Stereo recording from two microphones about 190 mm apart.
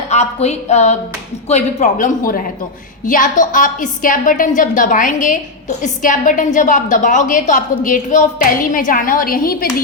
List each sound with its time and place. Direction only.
0.1 s a man's voice: 35° left (ahead or behind)